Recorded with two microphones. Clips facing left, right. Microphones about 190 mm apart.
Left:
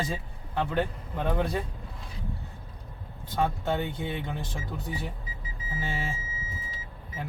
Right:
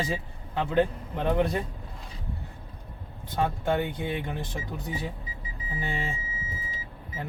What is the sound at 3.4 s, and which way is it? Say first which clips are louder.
Speech: right 2 dB; 15° right (ahead or behind).